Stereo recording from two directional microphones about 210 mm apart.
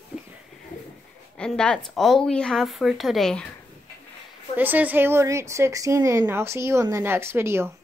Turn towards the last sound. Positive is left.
turn(degrees=-10)  # may be behind; listen again after turning